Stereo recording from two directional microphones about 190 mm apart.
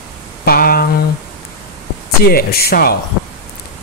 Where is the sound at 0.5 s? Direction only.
50° left (ahead or behind).